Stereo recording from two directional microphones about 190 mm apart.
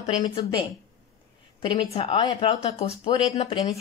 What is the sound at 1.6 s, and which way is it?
A woman's voice, 25° left (ahead or behind).